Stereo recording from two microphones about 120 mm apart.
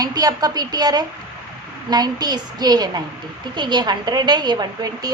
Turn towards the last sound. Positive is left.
turn(degrees=-35)  # may be behind; listen again after turning